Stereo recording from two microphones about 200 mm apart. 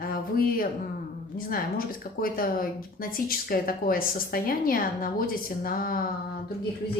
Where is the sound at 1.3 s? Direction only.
45° left (ahead or behind).